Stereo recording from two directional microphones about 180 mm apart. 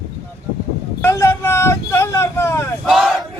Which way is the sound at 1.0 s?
15° left (ahead or behind).